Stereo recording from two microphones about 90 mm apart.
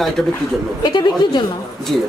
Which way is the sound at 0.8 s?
55° left (ahead or behind).